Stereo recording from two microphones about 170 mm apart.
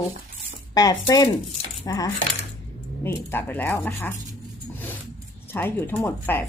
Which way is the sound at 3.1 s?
10° left (ahead or behind).